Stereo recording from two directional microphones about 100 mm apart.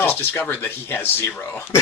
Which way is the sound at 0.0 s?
20° left (ahead or behind).